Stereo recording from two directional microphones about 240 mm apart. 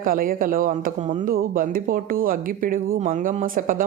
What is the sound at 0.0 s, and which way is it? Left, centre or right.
Speech, right.